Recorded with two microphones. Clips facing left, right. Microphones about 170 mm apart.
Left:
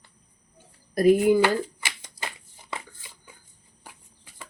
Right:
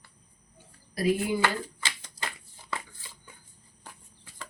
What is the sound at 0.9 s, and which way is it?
Speech, 50° left (ahead or behind).